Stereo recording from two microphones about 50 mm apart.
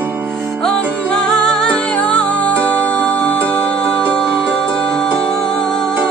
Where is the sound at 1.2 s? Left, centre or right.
Centre.